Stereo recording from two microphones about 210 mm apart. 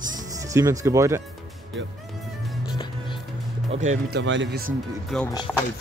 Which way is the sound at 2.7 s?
20° left (ahead or behind).